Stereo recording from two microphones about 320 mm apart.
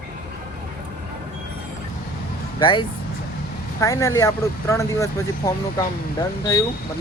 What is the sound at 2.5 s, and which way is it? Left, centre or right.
Speech, centre.